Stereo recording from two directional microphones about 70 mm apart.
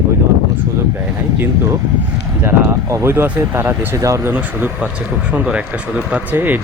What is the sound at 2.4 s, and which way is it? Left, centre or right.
Speech, right.